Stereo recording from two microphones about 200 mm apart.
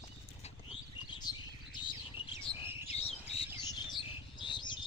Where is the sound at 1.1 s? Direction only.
20° left (ahead or behind).